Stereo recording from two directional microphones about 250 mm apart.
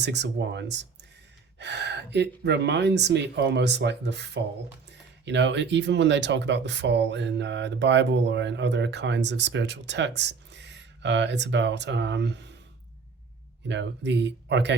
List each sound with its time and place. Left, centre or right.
0.0 s speech: right
13.7 s speech: right